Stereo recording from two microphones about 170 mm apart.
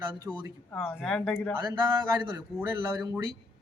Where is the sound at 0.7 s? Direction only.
5° left (ahead or behind).